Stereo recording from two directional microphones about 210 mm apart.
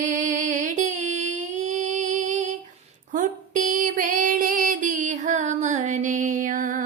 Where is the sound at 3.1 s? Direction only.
40° right (ahead or behind).